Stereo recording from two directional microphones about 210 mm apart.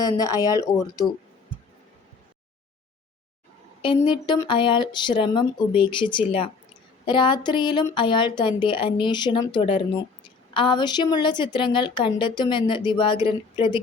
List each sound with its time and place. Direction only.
0.0 s speech: 15° left (ahead or behind)
3.8 s a woman's voice: 20° left (ahead or behind)